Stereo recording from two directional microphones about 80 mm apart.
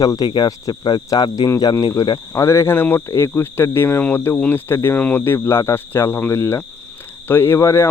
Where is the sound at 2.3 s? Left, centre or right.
Left.